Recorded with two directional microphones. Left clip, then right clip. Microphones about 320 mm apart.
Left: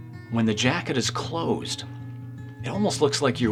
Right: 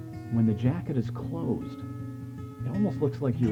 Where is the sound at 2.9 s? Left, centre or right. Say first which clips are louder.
Left 10 dB; centre.